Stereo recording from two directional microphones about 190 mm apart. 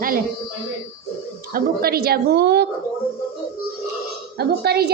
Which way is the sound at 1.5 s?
55° right (ahead or behind).